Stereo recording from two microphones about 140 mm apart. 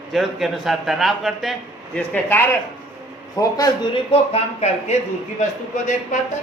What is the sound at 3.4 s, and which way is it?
Speech, 25° left (ahead or behind).